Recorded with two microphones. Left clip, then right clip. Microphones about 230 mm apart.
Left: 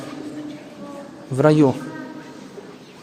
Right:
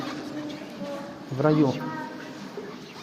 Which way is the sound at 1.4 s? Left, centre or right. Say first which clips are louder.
Left 7 dB; left.